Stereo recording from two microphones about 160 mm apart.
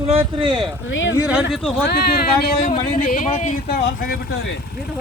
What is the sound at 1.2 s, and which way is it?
Speech, 10° right (ahead or behind).